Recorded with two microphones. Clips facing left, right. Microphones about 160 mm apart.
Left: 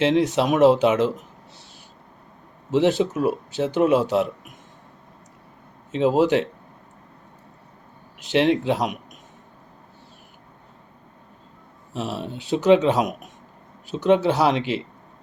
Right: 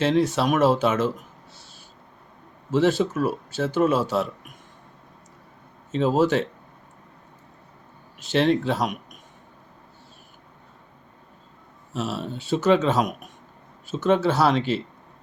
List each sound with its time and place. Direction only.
0.0 s speech: 15° left (ahead or behind)
2.6 s speech: 15° left (ahead or behind)
5.9 s speech: 15° left (ahead or behind)
8.2 s speech: 15° left (ahead or behind)
11.9 s speech: 15° left (ahead or behind)